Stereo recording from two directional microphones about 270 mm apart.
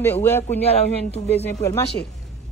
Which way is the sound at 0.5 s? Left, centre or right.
Left.